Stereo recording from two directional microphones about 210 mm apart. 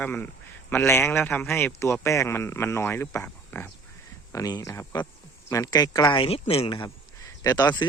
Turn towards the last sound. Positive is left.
turn(degrees=20)  # may be behind; listen again after turning